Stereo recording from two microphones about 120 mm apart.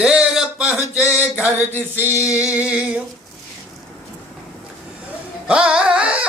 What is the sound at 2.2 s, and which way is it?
Speech, 10° right (ahead or behind).